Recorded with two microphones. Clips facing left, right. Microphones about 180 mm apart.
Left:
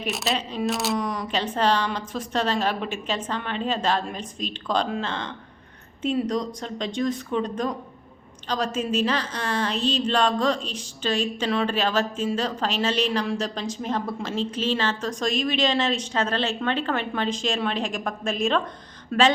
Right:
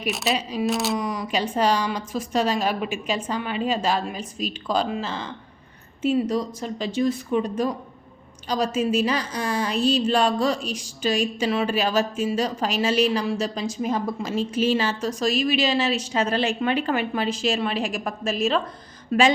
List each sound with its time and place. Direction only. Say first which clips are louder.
0.1 s a woman's voice: right 3 dB; centre (ahead or behind)